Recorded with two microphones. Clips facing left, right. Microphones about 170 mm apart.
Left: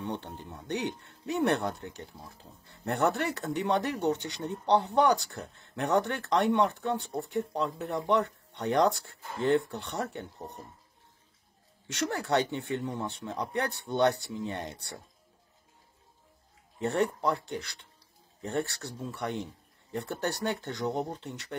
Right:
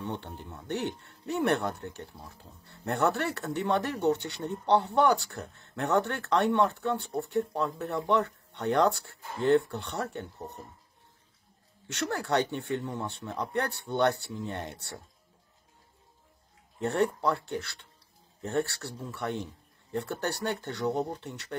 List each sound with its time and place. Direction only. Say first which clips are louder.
0.0 s speech: left 1 dB; 20° left (ahead or behind)
12.1 s speech: right 1 dB; 15° left (ahead or behind)
16.8 s speech: right 1 dB; 15° left (ahead or behind)